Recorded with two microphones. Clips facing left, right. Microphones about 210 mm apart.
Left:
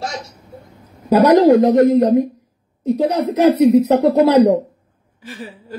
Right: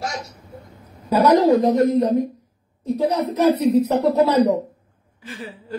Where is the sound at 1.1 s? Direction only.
70° left (ahead or behind).